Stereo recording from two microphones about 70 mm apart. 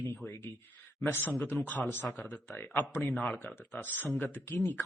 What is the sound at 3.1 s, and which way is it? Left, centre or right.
Speech, centre.